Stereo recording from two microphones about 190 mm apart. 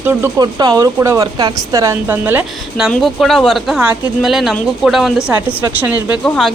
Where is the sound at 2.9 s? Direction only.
Centre (ahead or behind).